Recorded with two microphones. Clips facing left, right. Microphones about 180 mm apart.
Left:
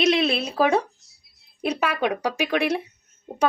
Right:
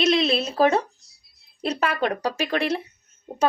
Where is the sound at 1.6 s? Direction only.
10° left (ahead or behind).